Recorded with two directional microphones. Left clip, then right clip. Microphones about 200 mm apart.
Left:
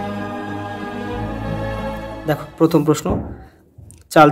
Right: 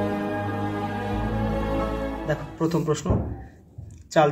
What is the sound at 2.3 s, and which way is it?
Speech, 45° left (ahead or behind).